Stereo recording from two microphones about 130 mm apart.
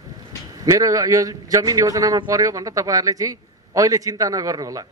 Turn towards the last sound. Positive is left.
turn(degrees=-25)  # may be behind; listen again after turning